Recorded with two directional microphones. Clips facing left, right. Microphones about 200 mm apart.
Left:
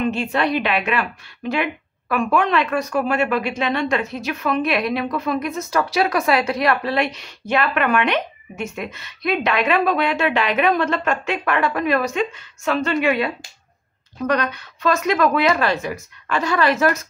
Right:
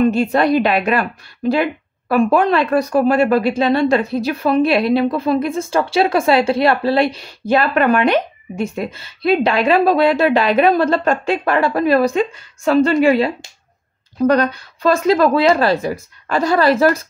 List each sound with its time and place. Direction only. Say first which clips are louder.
0.0 s a woman's voice: right 6 dB; 40° right (ahead or behind)